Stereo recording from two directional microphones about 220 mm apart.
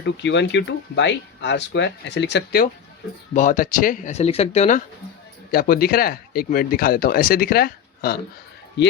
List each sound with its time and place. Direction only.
0.0 s speech: 55° left (ahead or behind)
3.3 s speech: 35° left (ahead or behind)
5.5 s speech: 45° left (ahead or behind)